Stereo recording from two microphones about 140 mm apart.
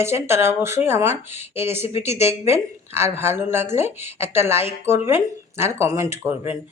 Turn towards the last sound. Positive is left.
turn(degrees=-20)  # may be behind; listen again after turning